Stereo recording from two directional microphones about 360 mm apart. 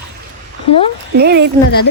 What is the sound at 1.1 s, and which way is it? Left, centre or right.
Speech, right.